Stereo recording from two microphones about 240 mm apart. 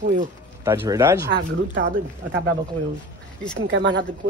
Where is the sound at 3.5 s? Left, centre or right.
Right.